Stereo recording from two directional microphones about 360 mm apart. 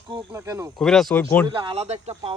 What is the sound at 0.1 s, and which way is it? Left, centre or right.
Speech, centre.